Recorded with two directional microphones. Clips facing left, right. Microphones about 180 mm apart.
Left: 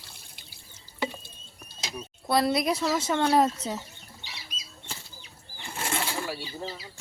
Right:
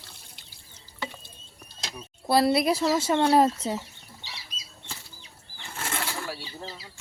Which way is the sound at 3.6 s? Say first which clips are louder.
Right 3 dB; 10° right (ahead or behind).